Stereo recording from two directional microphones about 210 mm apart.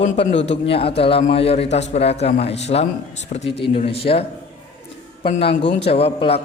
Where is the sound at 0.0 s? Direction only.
30° left (ahead or behind).